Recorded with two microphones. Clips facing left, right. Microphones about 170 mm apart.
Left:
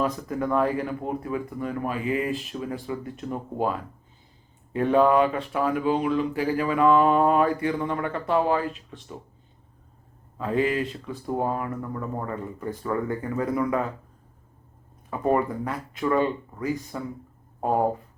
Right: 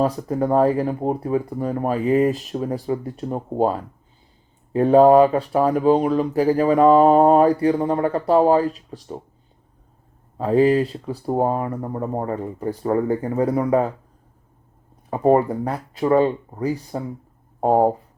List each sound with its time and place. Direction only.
0.0 s speech: 35° right (ahead or behind)
10.3 s speech: 35° right (ahead or behind)
15.1 s speech: 35° right (ahead or behind)